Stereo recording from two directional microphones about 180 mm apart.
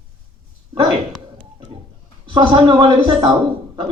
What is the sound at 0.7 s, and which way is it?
Speech, 25° right (ahead or behind).